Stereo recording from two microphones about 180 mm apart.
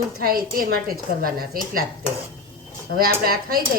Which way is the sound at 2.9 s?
55° right (ahead or behind).